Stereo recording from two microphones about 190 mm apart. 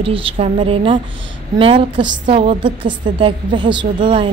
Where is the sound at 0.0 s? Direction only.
30° right (ahead or behind).